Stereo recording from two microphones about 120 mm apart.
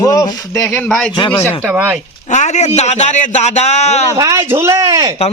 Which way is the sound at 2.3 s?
75° left (ahead or behind).